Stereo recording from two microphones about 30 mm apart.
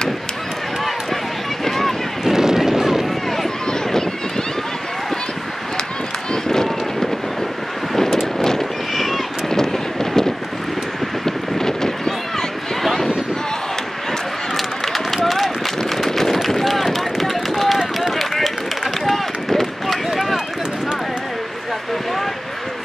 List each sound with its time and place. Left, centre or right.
1.6 s vehicle: centre
2.2 s vehicle: centre
6.3 s run: centre
7.9 s vehicle: centre
8.9 s a sound: centre
9.5 s vehicle: centre
11.2 s a sound: centre
15.2 s a sound: centre
16.0 s run: centre